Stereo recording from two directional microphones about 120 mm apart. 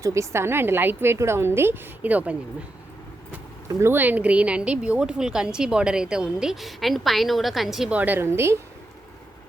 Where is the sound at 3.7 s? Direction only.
20° right (ahead or behind); by 7.9 s centre (ahead or behind).